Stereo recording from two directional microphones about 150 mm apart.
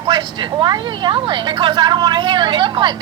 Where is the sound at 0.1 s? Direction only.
30° right (ahead or behind).